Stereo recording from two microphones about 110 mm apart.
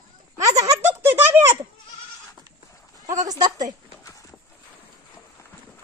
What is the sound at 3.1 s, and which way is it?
Speech, 35° right (ahead or behind).